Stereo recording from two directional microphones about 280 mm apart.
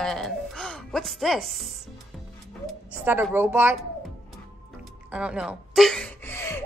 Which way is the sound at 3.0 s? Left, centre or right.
Centre.